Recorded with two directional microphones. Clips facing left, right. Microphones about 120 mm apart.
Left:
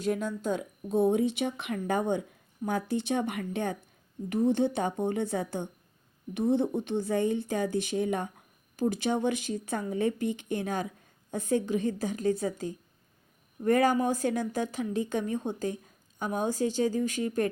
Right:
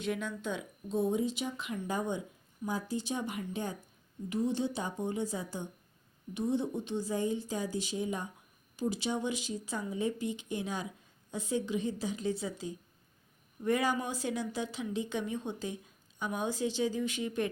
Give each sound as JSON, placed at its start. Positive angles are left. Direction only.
{"t": 0.0, "sound": "a woman's voice", "side_deg": 40}